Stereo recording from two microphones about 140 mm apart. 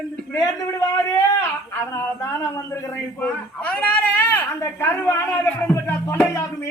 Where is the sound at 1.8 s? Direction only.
20° left (ahead or behind).